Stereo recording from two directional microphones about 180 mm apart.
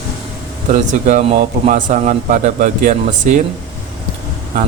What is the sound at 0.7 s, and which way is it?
Speech, 40° right (ahead or behind).